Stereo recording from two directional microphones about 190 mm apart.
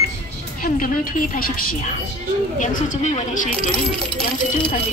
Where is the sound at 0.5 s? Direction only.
45° left (ahead or behind).